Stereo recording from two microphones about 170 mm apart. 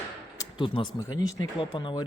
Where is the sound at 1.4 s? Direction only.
30° left (ahead or behind).